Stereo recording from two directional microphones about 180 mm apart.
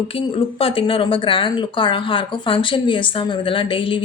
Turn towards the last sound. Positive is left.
turn(degrees=30)  # may be behind; listen again after turning